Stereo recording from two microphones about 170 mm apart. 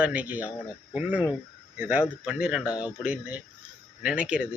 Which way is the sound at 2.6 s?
25° left (ahead or behind).